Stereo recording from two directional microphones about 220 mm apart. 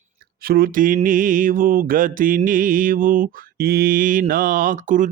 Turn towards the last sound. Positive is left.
turn(degrees=-35)  # may be behind; listen again after turning